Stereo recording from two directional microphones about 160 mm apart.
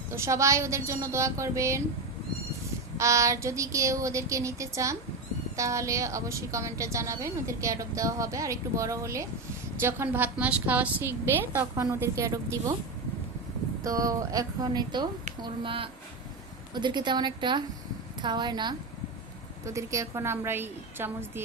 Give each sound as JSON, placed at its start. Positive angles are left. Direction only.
{"t": 0.1, "sound": "a woman's voice", "side_deg": -20}
{"t": 3.0, "sound": "a woman's voice", "side_deg": -20}
{"t": 13.8, "sound": "a woman's voice", "side_deg": -20}